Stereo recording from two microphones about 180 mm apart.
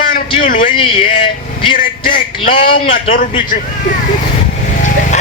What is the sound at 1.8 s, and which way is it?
Speech, 50° left (ahead or behind).